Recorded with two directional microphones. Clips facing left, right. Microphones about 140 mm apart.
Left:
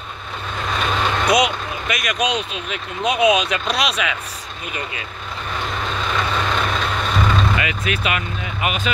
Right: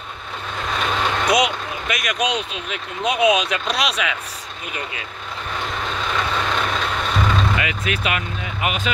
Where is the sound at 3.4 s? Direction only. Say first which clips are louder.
Left 1 dB; 60° left (ahead or behind).